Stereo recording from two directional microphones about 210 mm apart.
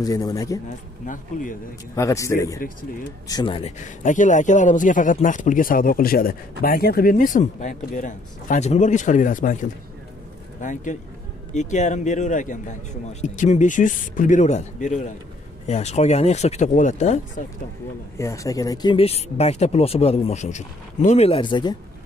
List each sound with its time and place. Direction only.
0.0 s speech: 15° left (ahead or behind)
1.0 s speech: 40° left (ahead or behind)
2.0 s speech: 15° left (ahead or behind)
2.6 s speech: 40° left (ahead or behind)
3.3 s speech: 20° left (ahead or behind)
18.1 s speech: 15° left (ahead or behind)